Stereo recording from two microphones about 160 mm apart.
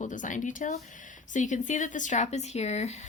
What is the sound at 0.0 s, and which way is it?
Speech, 55° left (ahead or behind).